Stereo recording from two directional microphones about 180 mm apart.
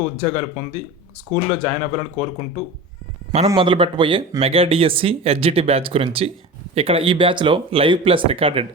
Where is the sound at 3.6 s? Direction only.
30° right (ahead or behind).